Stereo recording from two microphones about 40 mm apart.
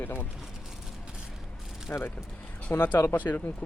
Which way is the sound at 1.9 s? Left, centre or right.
Left.